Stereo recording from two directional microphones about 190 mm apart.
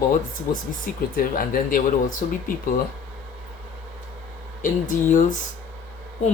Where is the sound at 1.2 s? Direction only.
50° left (ahead or behind).